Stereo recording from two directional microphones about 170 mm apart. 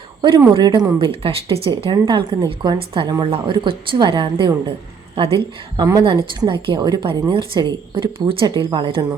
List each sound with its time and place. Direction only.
0.2 s speech: 25° right (ahead or behind)
5.7 s speech: 25° right (ahead or behind)